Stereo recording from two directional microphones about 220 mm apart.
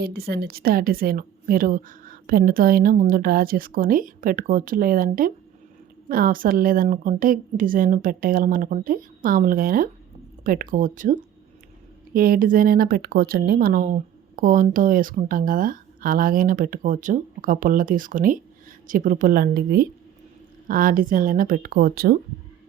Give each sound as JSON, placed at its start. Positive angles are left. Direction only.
{"t": 0.0, "sound": "speech", "side_deg": -45}